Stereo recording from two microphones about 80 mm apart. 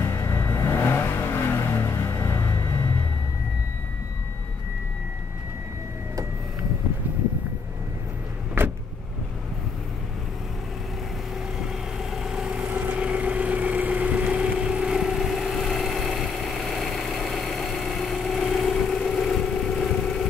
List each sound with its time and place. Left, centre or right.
0.0 s vehicle: left
8.6 s vehicle: right
11.5 s vehicle: centre